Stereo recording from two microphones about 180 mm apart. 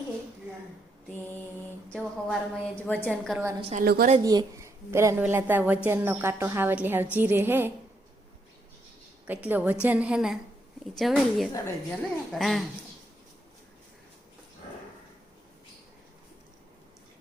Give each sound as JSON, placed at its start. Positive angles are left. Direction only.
{"t": 1.9, "sound": "a woman's voice", "side_deg": 5}
{"t": 3.6, "sound": "a woman's voice", "side_deg": -35}
{"t": 3.8, "sound": "a woman's voice", "side_deg": -55}
{"t": 4.2, "sound": "a woman's voice", "side_deg": -20}
{"t": 9.2, "sound": "a woman's voice", "side_deg": -10}